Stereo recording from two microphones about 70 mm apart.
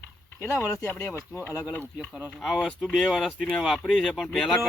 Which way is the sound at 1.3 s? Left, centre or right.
Right.